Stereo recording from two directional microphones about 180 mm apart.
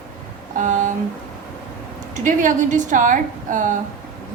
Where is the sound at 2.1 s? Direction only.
45° right (ahead or behind).